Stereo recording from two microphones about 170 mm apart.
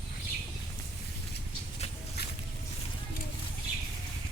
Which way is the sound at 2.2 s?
70° left (ahead or behind).